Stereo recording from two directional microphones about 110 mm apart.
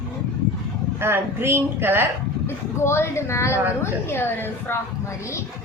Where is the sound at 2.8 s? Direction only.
25° left (ahead or behind).